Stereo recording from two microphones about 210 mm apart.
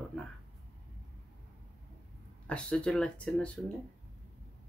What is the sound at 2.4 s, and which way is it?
Speech, 5° left (ahead or behind).